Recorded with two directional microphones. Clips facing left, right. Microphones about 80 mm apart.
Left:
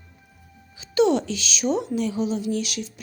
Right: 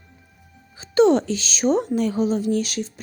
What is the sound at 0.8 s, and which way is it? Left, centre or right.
Speech, right.